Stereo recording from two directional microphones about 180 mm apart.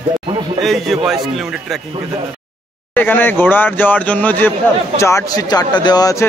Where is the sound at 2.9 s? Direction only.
10° left (ahead or behind).